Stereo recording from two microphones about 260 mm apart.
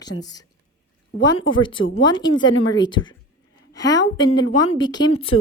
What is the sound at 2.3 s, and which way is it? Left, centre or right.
Speech, left.